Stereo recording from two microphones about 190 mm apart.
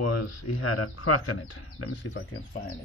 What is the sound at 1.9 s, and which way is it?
Speech, 70° left (ahead or behind).